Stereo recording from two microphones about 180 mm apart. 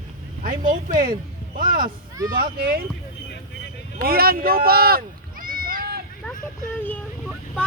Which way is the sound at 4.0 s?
55° right (ahead or behind).